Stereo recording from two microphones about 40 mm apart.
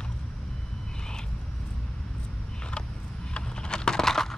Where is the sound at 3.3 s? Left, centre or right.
Left.